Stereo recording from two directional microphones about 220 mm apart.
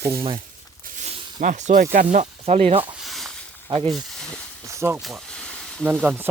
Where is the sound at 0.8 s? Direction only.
30° right (ahead or behind).